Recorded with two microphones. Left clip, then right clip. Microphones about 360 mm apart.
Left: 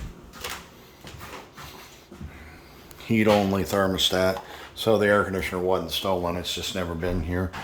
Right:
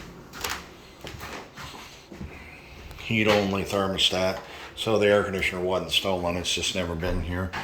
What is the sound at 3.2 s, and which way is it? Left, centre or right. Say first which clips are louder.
Speech: left 2 dB; centre.